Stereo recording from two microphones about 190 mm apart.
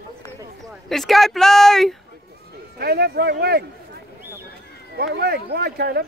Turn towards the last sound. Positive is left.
turn(degrees=-60)  # may be behind; listen again after turning